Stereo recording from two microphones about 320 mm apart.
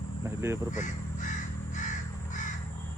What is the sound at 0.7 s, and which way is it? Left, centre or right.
Crow, left.